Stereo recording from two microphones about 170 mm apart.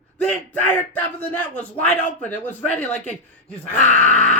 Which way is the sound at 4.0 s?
5° left (ahead or behind).